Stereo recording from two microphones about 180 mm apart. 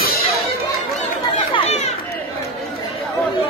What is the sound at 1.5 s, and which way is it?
Chatter, 35° left (ahead or behind).